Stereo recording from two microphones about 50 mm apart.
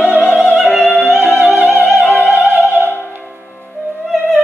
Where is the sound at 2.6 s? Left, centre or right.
Right.